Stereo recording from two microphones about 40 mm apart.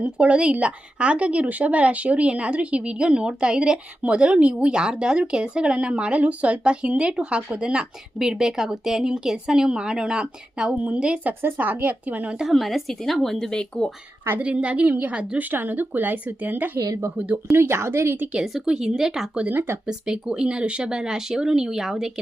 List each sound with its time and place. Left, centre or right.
0.0 s speech: right
11.4 s speech: right
12.5 s speech: centre
13.6 s speech: left
14.3 s speech: right
15.4 s speech: right
17.5 s speech: right
18.6 s a woman's voice: centre